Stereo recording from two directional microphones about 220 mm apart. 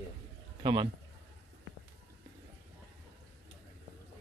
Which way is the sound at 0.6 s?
20° right (ahead or behind).